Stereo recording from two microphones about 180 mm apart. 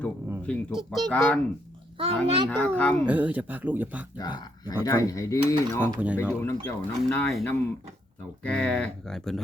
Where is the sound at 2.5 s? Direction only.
10° left (ahead or behind).